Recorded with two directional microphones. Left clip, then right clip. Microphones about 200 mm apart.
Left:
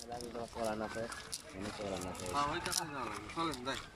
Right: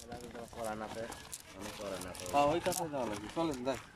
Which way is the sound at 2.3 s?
45° right (ahead or behind).